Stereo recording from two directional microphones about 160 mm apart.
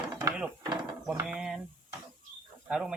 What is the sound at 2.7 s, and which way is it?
Speech, 5° right (ahead or behind).